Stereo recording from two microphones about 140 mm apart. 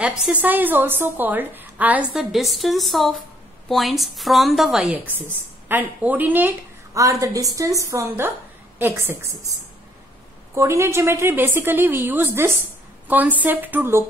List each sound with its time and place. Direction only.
0.0 s a woman's voice: 10° right (ahead or behind)